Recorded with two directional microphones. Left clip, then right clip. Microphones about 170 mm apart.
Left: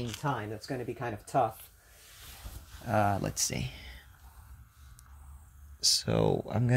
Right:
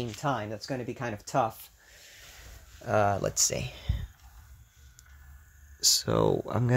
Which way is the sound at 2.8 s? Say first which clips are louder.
Right 3 dB; 25° right (ahead or behind).